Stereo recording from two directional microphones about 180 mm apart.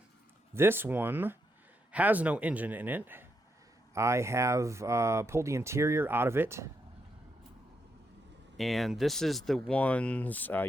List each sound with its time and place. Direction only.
0.5 s speech: 10° right (ahead or behind)
8.5 s speech: centre (ahead or behind)